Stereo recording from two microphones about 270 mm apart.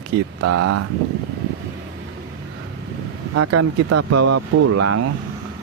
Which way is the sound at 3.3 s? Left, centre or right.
Right.